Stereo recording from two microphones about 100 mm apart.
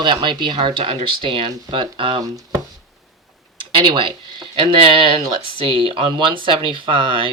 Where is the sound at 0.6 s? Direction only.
60° right (ahead or behind).